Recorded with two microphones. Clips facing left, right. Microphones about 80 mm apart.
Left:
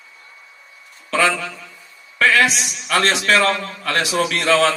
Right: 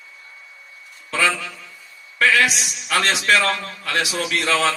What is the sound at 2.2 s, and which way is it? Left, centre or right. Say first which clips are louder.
A man's voice: left 2 dB; left.